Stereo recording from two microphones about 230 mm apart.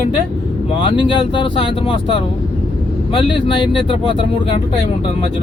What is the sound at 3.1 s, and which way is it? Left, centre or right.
Speech, left.